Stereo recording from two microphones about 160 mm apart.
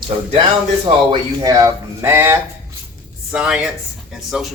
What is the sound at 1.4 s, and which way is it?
Speech, 20° right (ahead or behind).